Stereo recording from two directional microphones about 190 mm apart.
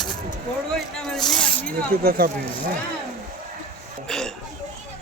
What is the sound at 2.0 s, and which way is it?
Speech, 50° right (ahead or behind).